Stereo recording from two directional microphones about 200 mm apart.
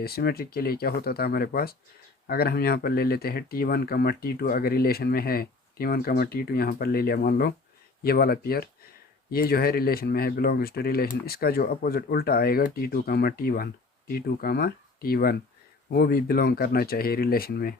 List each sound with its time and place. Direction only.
0.0 s speech: 50° left (ahead or behind)